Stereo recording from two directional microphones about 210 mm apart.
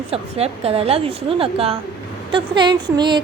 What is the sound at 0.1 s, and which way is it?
A woman's voice, 30° right (ahead or behind).